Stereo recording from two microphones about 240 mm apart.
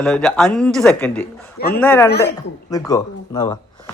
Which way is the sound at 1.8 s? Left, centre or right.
Centre.